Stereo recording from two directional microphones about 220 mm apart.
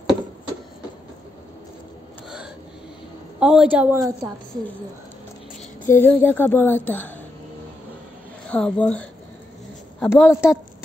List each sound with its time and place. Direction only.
2.2 s gasp: 5° right (ahead or behind)
3.3 s a woman's voice: 5° right (ahead or behind)
5.9 s a woman's voice: 10° left (ahead or behind)
8.5 s a woman's voice: 5° left (ahead or behind)
10.2 s a woman's voice: 10° left (ahead or behind)